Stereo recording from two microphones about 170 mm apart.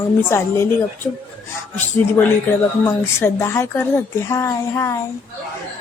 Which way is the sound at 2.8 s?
15° left (ahead or behind).